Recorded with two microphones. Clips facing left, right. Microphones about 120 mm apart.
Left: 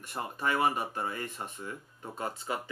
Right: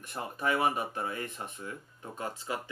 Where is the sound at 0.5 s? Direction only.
Centre (ahead or behind).